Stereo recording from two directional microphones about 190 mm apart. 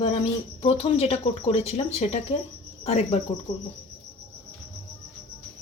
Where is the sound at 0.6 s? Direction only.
30° left (ahead or behind).